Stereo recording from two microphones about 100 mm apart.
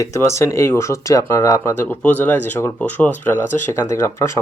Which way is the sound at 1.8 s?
15° left (ahead or behind).